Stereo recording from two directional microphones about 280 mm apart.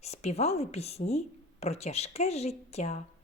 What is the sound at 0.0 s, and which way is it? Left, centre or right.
A woman's voice, left.